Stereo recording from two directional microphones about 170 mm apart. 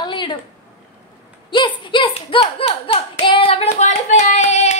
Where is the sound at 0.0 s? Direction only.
25° left (ahead or behind).